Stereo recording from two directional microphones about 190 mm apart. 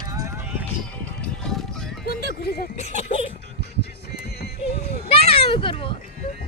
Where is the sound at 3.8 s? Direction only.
60° left (ahead or behind).